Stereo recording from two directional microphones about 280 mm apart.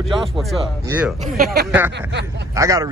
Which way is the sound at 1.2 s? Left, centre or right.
Right.